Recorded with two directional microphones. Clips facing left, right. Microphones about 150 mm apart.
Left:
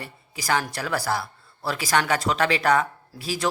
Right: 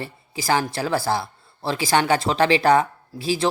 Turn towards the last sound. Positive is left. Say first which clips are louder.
# right 4 dB
turn(degrees=-25)  # may be behind; listen again after turning